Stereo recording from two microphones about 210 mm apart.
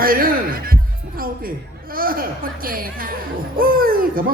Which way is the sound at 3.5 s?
45° right (ahead or behind).